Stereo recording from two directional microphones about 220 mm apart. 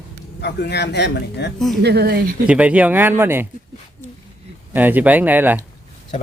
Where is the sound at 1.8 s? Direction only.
45° right (ahead or behind).